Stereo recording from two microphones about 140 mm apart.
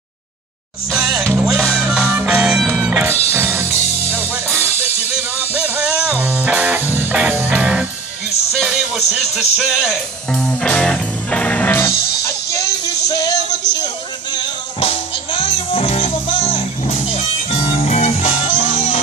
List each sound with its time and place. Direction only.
1.2 s music: 15° right (ahead or behind)
1.5 s music: 5° right (ahead or behind); by 13.6 s 25° left (ahead or behind)
14.8 s music: 40° left (ahead or behind)